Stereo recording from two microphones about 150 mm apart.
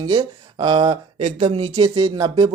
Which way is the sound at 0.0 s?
30° right (ahead or behind).